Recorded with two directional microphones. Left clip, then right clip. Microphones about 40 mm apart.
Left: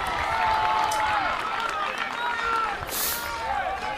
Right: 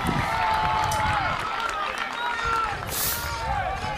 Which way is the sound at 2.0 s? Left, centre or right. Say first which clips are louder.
Even; centre.